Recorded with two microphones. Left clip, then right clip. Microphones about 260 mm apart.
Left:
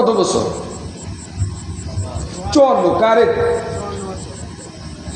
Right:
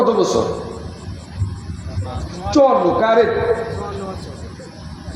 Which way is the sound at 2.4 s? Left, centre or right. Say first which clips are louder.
Left 1 dB; left.